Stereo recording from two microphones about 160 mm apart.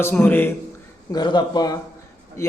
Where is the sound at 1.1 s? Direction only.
30° left (ahead or behind).